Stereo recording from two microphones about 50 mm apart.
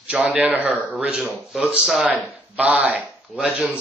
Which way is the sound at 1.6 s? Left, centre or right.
Centre.